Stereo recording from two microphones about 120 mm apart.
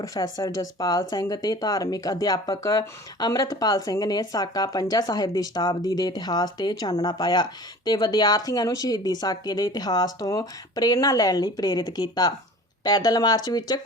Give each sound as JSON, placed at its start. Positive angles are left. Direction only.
{"t": 0.0, "sound": "speech", "side_deg": 30}